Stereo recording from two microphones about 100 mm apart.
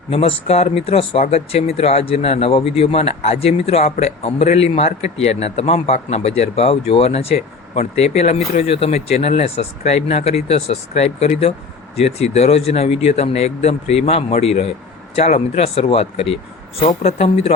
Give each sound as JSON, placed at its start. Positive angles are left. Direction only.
{"t": 0.1, "sound": "speech", "side_deg": 70}
{"t": 16.8, "sound": "speech", "side_deg": 90}